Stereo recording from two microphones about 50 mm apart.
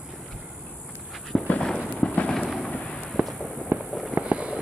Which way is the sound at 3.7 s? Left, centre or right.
Right.